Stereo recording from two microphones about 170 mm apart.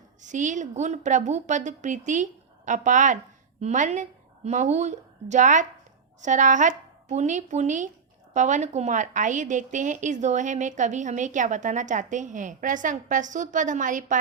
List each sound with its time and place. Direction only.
0.2 s a woman's voice: 45° right (ahead or behind)